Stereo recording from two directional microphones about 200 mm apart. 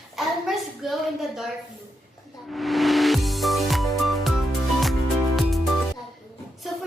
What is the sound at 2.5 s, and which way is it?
Music, centre (ahead or behind).